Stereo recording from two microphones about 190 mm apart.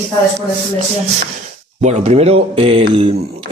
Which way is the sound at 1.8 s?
35° right (ahead or behind).